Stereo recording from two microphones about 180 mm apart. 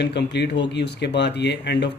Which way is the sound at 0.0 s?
75° left (ahead or behind).